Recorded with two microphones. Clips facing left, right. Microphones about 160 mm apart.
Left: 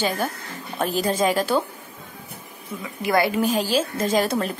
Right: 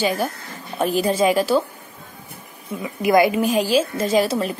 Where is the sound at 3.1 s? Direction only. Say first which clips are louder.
Right 5 dB; 20° right (ahead or behind).